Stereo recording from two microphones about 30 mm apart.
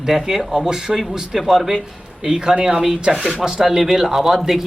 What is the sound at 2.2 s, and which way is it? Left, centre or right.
Speech, right.